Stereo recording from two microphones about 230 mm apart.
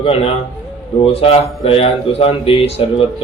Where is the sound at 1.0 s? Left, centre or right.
Left.